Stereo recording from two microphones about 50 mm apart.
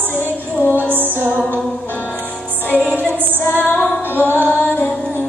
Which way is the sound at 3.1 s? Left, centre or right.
Right.